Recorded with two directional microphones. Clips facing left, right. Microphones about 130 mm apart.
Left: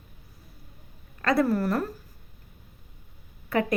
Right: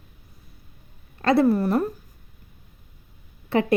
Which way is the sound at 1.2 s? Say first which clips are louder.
Right 5 dB; 30° right (ahead or behind).